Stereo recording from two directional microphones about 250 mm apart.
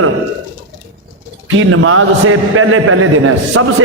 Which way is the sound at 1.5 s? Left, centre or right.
Right.